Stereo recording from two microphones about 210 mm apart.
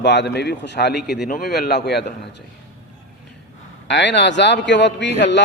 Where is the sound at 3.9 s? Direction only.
55° left (ahead or behind).